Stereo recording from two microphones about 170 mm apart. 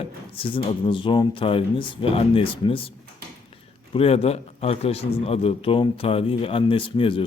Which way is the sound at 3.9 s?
35° left (ahead or behind).